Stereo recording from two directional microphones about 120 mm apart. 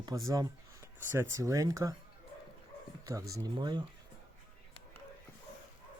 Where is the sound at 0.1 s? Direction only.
30° right (ahead or behind).